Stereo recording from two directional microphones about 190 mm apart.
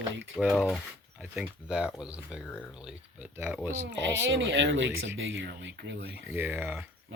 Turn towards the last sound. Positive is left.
turn(degrees=-10)  # may be behind; listen again after turning